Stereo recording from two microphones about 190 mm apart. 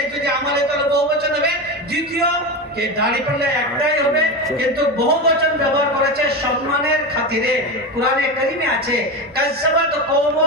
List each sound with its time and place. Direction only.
3.1 s a man's voice: 55° right (ahead or behind)